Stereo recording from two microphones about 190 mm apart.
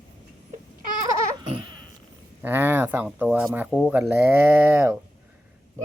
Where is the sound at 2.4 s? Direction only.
10° right (ahead or behind).